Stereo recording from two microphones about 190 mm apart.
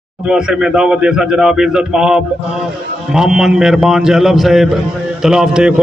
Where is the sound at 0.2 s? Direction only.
5° right (ahead or behind).